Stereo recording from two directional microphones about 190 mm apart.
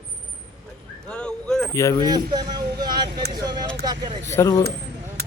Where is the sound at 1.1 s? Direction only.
5° left (ahead or behind).